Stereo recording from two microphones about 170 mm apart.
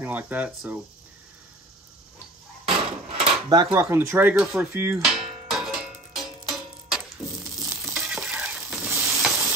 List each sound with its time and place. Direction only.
0.0 s speech: 10° right (ahead or behind)
3.1 s drawer open or close: 25° right (ahead or behind)
3.7 s speech: 15° right (ahead or behind)
4.9 s cowbell: 5° right (ahead or behind)
7.6 s stir: 15° right (ahead or behind)
7.9 s stir: 5° right (ahead or behind)